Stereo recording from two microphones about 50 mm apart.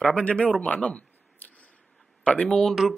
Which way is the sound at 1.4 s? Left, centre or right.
Left.